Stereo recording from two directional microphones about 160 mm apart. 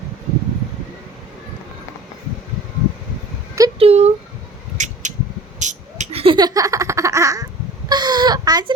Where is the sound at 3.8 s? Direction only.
40° right (ahead or behind).